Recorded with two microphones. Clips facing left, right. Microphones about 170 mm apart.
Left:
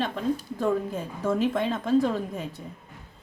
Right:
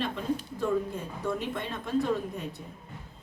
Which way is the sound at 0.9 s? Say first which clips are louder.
Left 5 dB; 90° left.